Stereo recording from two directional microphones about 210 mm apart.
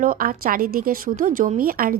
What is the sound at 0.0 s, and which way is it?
Speech, 40° right (ahead or behind).